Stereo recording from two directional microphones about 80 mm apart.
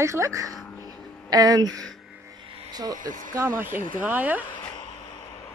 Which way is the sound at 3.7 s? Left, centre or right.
Right.